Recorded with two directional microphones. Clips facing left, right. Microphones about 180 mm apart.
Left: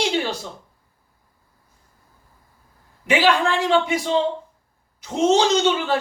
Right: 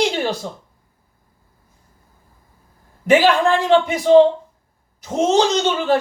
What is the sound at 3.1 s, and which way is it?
A man's voice, 45° right (ahead or behind).